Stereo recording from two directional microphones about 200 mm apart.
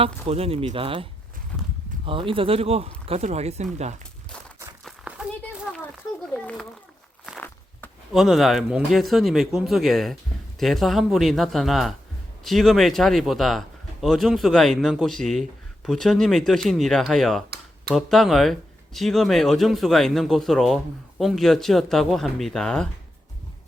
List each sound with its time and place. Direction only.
0.0 s speech: 30° right (ahead or behind)
2.0 s speech: 25° right (ahead or behind)
4.8 s a sound: centre (ahead or behind)
6.3 s a man's voice: 5° left (ahead or behind)